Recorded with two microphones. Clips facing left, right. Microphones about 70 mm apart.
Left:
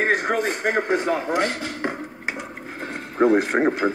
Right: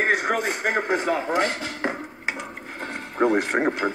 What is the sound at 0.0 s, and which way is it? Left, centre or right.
Speech, centre.